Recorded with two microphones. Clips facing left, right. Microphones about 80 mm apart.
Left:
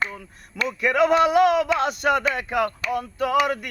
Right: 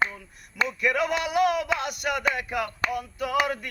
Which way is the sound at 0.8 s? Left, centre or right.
Left.